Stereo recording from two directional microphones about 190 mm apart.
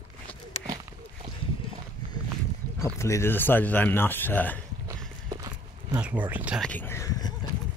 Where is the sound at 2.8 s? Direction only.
15° left (ahead or behind).